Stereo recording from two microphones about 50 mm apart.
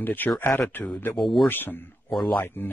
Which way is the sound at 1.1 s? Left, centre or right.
Centre.